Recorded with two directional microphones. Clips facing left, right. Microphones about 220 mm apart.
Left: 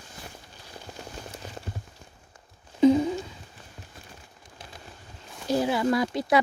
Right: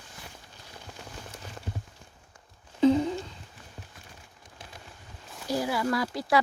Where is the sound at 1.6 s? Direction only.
30° left (ahead or behind).